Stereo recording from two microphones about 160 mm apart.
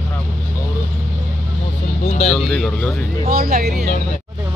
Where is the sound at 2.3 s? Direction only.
5° left (ahead or behind).